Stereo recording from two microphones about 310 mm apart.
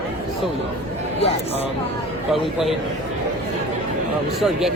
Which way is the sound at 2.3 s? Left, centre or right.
Centre.